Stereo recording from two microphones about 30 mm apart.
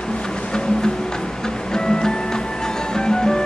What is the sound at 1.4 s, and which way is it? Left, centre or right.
Music, left.